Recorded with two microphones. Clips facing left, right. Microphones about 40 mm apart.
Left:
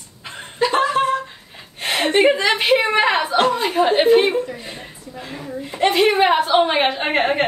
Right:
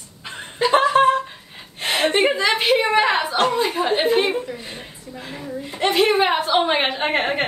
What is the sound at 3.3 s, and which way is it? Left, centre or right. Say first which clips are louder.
Speech: left 2 dB; left.